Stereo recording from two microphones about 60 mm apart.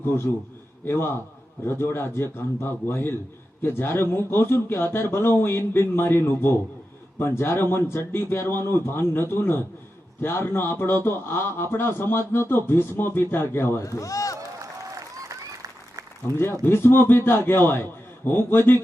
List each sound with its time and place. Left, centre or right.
0.0 s a man's voice: left
13.8 s a man's voice: left
14.3 s a sound: right
16.4 s speech: left